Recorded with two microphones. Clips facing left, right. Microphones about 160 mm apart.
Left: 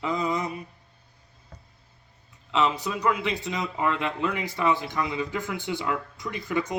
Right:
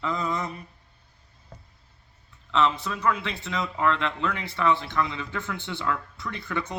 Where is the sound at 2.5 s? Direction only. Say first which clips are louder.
Right 1 dB; 15° left (ahead or behind).